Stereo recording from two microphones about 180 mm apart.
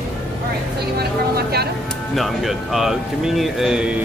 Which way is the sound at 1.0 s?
60° right (ahead or behind).